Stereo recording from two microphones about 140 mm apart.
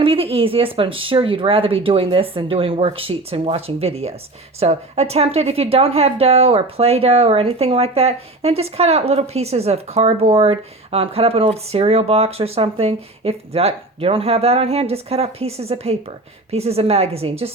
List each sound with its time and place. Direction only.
0.0 s speech: 40° right (ahead or behind)